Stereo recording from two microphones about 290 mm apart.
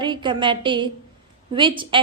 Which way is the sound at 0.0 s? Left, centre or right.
Centre.